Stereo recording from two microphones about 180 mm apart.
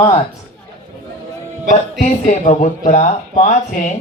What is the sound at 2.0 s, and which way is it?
Speech, 40° left (ahead or behind).